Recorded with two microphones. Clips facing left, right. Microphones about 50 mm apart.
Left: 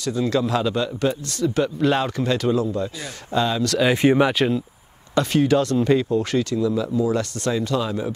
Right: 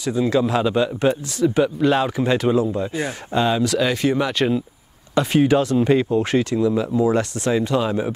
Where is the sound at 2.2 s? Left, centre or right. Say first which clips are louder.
Right 3 dB; centre.